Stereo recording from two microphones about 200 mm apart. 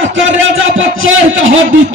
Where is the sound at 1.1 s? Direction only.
80° right.